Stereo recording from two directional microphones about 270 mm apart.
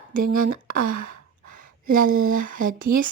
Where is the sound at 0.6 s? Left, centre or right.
Right.